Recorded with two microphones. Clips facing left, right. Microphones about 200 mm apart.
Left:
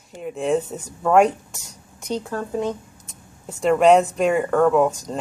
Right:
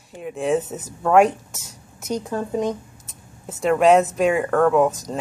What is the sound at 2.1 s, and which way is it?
Speech, 15° right (ahead or behind).